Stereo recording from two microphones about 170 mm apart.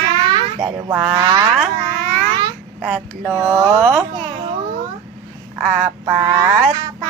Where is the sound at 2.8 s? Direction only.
5° right (ahead or behind).